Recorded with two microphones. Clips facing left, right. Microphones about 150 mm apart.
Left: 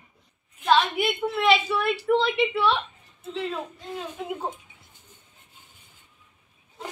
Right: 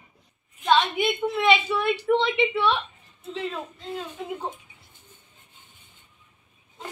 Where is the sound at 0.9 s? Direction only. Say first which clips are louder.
Right 1 dB; 5° left (ahead or behind).